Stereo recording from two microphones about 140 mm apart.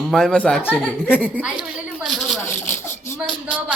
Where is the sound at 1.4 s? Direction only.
10° right (ahead or behind).